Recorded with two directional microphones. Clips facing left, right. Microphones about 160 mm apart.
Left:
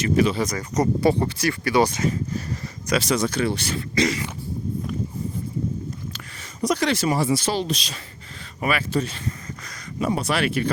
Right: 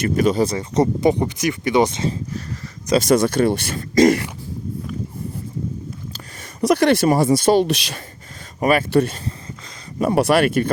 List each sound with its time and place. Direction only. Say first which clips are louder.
0.0 s speech: right 3 dB; 45° right (ahead or behind)
0.4 s speech: right 4 dB; 25° right (ahead or behind)
3.0 s speech: right 8 dB; 55° right (ahead or behind)
6.6 s speech: right 7 dB; 60° right (ahead or behind)
8.9 s speech: right 7 dB; 60° right (ahead or behind)